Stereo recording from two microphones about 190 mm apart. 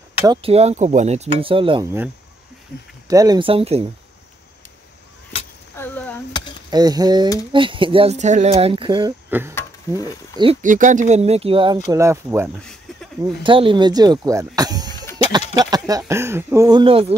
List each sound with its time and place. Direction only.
0.3 s speech: 30° right (ahead or behind)
3.1 s speech: 20° right (ahead or behind)
5.8 s a sound: 10° left (ahead or behind)
6.7 s speech: 20° right (ahead or behind)
9.6 s a sound: 15° left (ahead or behind)
10.3 s speech: 25° right (ahead or behind)
10.6 s speech: 45° right (ahead or behind); by 11.8 s 25° right (ahead or behind)
11.9 s speech: 15° right (ahead or behind)
12.5 s a sound: 5° left (ahead or behind)
13.2 s speech: 25° right (ahead or behind)
15.5 s a sound: 20° right (ahead or behind)
16.1 s speech: 15° right (ahead or behind); by 17.1 s 30° right (ahead or behind)